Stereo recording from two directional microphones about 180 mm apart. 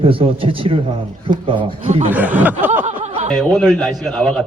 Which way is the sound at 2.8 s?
40° right (ahead or behind).